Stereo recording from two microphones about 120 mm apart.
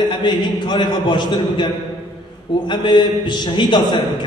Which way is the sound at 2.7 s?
40° left (ahead or behind).